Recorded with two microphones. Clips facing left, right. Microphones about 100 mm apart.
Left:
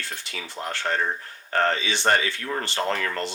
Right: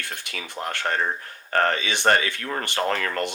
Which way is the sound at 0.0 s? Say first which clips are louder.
Right 1 dB; 60° right (ahead or behind).